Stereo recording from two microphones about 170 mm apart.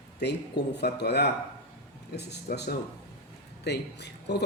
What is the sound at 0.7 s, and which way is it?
Speech, 75° left (ahead or behind).